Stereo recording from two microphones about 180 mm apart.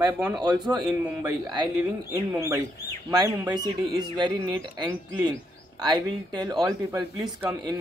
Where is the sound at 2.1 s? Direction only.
20° right (ahead or behind).